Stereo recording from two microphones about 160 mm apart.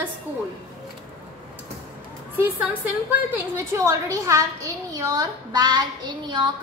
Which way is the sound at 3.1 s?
20° right (ahead or behind).